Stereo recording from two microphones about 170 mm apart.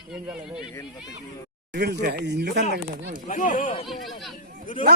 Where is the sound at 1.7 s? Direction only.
75° right (ahead or behind).